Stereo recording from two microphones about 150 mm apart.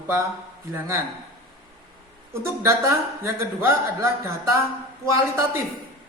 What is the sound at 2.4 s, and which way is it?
A man's voice, 20° right (ahead or behind).